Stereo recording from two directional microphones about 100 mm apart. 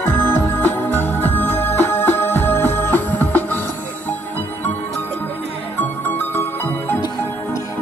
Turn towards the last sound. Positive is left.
turn(degrees=20)  # may be behind; listen again after turning